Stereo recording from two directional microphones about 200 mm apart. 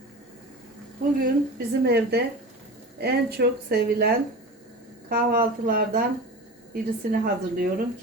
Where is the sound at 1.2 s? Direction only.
50° right (ahead or behind).